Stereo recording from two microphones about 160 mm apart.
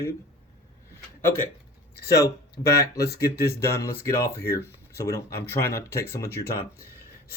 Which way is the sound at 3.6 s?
15° left (ahead or behind).